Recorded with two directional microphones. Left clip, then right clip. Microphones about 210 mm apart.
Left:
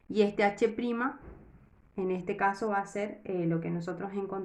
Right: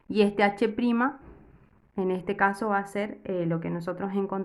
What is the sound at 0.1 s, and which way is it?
Speech, 35° right (ahead or behind).